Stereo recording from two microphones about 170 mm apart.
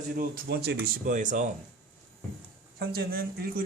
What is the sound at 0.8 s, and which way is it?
Speech, 50° right (ahead or behind).